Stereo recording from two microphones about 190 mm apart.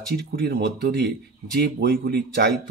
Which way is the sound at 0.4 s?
55° right (ahead or behind).